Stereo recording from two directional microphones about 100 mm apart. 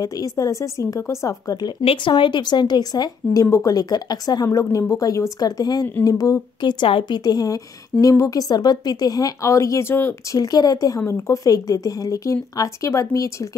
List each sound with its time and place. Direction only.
0.0 s speech: 35° left (ahead or behind)
1.9 s speech: 55° left (ahead or behind)
7.2 s speech: 40° left (ahead or behind)
10.3 s speech: 40° left (ahead or behind)
11.0 s speech: 30° left (ahead or behind)